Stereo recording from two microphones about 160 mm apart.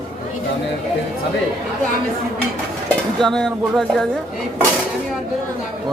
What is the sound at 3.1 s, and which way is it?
Speech, centre (ahead or behind).